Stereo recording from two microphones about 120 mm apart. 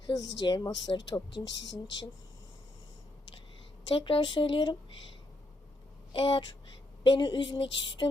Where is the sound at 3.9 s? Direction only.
45° left (ahead or behind).